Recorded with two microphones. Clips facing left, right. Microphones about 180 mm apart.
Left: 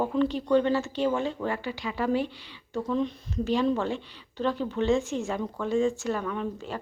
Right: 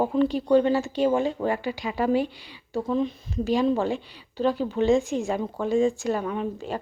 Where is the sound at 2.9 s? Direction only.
5° right (ahead or behind).